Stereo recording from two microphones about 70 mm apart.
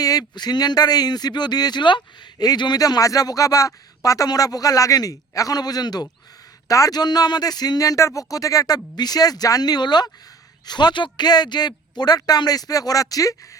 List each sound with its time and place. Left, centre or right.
0.0 s a man's voice: left
6.7 s speech: left